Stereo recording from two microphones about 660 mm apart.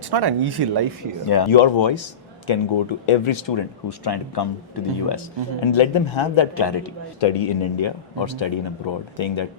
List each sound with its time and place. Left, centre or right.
0.1 s speech: right
1.3 s speech: left
7.2 s speech: left